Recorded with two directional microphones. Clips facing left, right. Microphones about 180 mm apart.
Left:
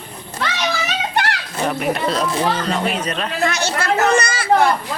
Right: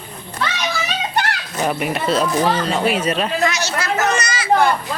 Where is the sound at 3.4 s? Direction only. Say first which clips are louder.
Left 2 dB; 55° left (ahead or behind).